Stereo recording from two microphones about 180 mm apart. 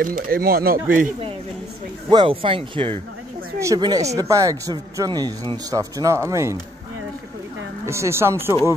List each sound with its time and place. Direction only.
0.0 s speech: 50° right (ahead or behind)
2.0 s speech: 25° right (ahead or behind)
3.5 s speech: 20° right (ahead or behind)
7.8 s speech: 15° right (ahead or behind)